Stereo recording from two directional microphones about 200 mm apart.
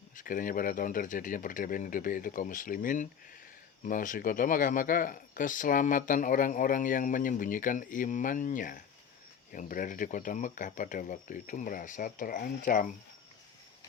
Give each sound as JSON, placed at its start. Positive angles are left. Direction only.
{"t": 0.2, "sound": "speech", "side_deg": 40}